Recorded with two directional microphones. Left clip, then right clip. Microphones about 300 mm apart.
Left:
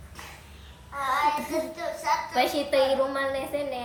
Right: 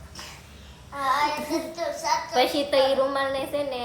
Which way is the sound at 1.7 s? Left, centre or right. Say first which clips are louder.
Right 3 dB; centre.